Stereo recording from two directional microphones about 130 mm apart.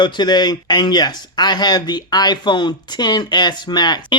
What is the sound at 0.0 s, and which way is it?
Speech, 35° left (ahead or behind).